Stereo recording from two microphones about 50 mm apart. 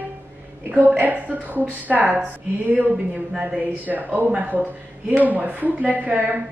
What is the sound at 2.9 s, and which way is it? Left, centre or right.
Speech, centre.